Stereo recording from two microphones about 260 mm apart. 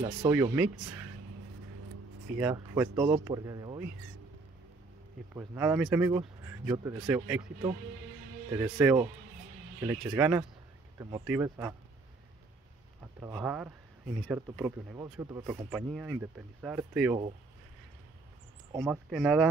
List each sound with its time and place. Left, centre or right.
0.0 s speech: centre
2.3 s speech: centre
5.3 s speech: centre
8.5 s speech: centre
13.2 s speech: centre
18.9 s speech: centre